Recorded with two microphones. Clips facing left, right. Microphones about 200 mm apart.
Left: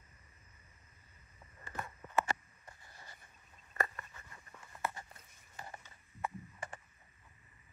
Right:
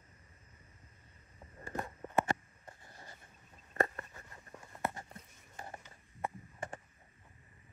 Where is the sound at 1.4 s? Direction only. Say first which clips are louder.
Right 5 dB; 35° right (ahead or behind).